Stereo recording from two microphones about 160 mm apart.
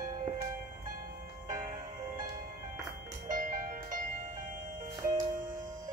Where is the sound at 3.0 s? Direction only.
55° right (ahead or behind).